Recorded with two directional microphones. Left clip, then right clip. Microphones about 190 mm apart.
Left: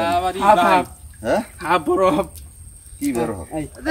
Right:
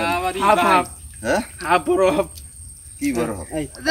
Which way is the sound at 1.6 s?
55° left (ahead or behind).